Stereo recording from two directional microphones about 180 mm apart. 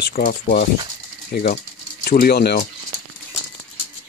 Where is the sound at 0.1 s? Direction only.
50° left (ahead or behind).